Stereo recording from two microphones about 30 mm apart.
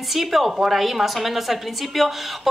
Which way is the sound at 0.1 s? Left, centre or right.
Centre.